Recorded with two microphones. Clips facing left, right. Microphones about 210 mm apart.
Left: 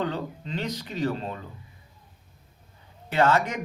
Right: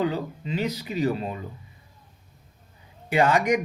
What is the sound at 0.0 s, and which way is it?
Speech, 10° right (ahead or behind).